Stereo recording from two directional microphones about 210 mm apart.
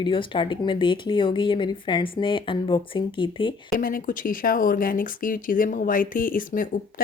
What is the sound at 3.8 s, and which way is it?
Speech, 40° left (ahead or behind).